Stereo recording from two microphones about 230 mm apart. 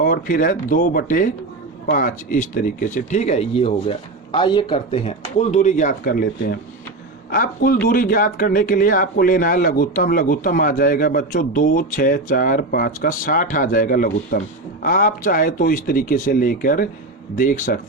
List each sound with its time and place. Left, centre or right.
0.0 s speech: left